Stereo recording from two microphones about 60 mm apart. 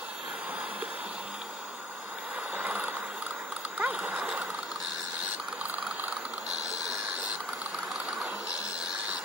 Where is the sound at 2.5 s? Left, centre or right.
Right.